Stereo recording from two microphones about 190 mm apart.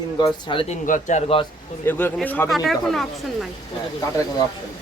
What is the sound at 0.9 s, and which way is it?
Speech, 40° left (ahead or behind).